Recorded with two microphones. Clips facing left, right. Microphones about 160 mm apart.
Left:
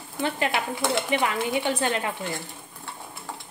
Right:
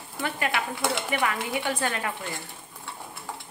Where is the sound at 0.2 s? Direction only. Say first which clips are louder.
Left 3 dB; 25° left (ahead or behind).